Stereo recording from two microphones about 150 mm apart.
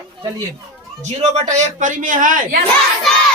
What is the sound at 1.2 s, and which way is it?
Speech, 55° right (ahead or behind).